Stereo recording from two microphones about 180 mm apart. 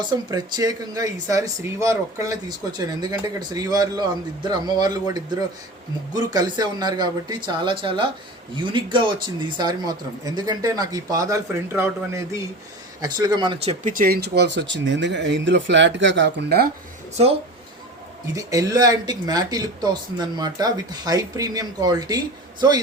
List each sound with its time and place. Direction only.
0.3 s speech: 20° right (ahead or behind)
13.8 s speech: 50° right (ahead or behind)
18.3 s speech: 20° right (ahead or behind)